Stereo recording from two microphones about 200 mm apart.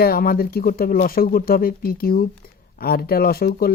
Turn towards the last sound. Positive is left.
turn(degrees=50)  # may be behind; listen again after turning